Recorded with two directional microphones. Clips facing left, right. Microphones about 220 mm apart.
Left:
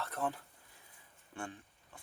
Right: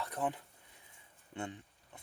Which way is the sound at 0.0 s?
15° right (ahead or behind).